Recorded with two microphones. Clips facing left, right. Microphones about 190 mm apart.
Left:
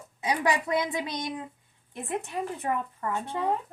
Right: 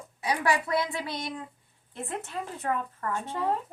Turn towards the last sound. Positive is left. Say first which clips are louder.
# left 1 dB
turn(degrees=15)  # may be behind; listen again after turning